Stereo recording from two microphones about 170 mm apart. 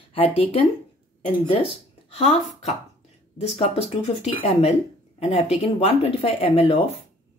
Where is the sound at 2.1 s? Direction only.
40° left (ahead or behind).